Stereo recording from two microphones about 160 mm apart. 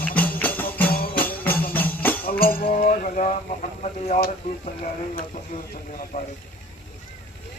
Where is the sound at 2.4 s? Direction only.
65° left (ahead or behind).